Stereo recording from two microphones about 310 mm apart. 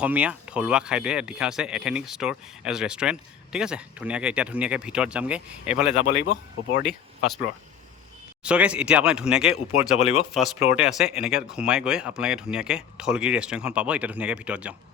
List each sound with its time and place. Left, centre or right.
0.0 s speech: centre
6.1 s speech: left
8.4 s speech: centre
10.0 s speech: centre
10.3 s speech: centre